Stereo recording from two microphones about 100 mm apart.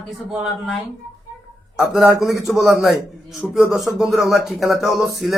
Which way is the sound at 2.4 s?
Centre (ahead or behind).